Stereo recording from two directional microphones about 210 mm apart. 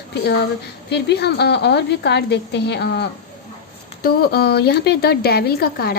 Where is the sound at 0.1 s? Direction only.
55° left (ahead or behind).